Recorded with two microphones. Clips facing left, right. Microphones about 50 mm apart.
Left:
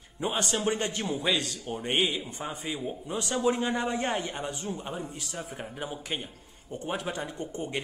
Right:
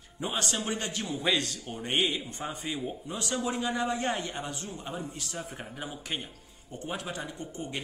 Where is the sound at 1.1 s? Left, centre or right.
Centre.